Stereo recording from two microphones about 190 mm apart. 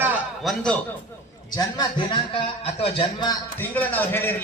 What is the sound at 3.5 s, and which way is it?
Speech, 10° left (ahead or behind).